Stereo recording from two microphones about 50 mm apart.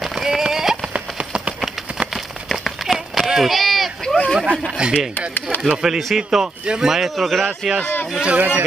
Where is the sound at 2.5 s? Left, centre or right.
Centre.